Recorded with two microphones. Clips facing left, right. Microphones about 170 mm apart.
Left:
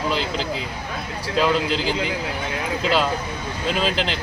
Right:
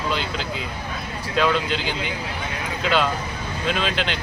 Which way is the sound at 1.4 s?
35° left (ahead or behind).